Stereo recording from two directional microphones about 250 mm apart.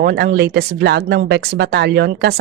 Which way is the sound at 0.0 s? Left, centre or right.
Right.